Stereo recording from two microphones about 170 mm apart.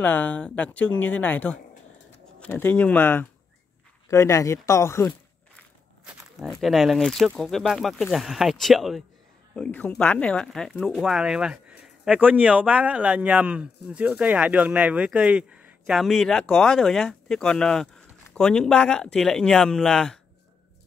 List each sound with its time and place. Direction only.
0.0 s speech: 10° left (ahead or behind)
6.4 s a man's voice: centre (ahead or behind)